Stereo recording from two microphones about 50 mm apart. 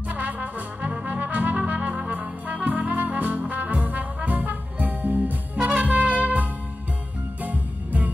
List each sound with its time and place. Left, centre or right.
0.1 s trumpet: right
5.8 s music: right
7.4 s music: right